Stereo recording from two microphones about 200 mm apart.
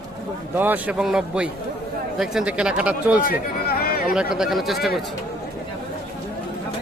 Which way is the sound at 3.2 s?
45° left (ahead or behind).